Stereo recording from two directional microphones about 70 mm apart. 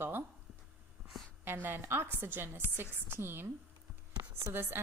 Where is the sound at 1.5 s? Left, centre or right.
Right.